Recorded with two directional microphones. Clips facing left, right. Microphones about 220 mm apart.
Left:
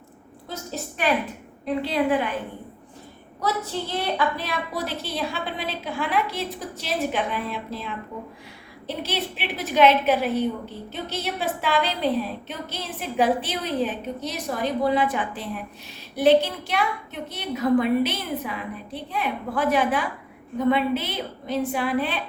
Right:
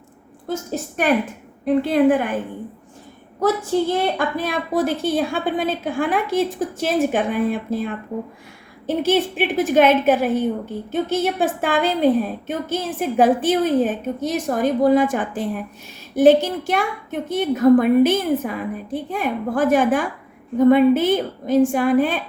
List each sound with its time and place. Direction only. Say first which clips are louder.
0.4 s a woman's voice: right 8 dB; 50° right (ahead or behind)
3.4 s a woman's voice: right 9 dB; 50° right (ahead or behind)